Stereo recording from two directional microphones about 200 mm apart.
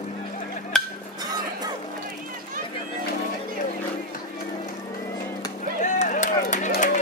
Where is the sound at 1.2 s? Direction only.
20° right (ahead or behind).